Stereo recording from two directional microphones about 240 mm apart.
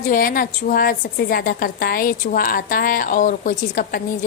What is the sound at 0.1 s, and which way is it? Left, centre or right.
A woman's voice, left.